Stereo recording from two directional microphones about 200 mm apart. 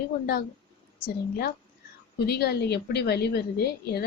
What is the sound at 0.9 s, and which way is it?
A woman's voice, 55° left (ahead or behind).